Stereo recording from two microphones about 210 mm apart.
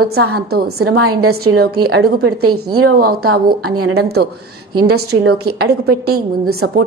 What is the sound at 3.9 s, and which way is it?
Speech, 50° right (ahead or behind).